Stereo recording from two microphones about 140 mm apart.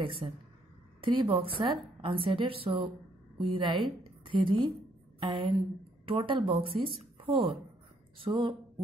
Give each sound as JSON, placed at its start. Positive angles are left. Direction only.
{"t": 0.2, "sound": "a woman's voice", "side_deg": -30}
{"t": 7.3, "sound": "speech", "side_deg": 0}
{"t": 8.2, "sound": "speech", "side_deg": -35}